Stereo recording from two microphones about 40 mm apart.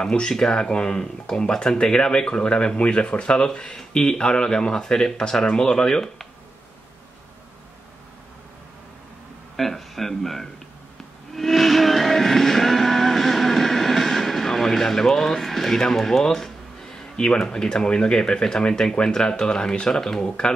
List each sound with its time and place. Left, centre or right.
0.3 s speech: centre
9.6 s speech: centre
11.3 s vehicle: centre; by 18.1 s left
18.1 s speech: centre